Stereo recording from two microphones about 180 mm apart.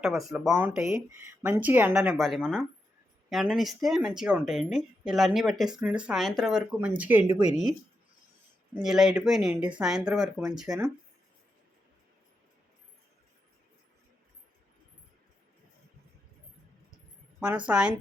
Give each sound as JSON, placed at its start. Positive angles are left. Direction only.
{"t": 0.0, "sound": "speech", "side_deg": 0}
{"t": 8.7, "sound": "speech", "side_deg": -5}
{"t": 17.7, "sound": "speech", "side_deg": -5}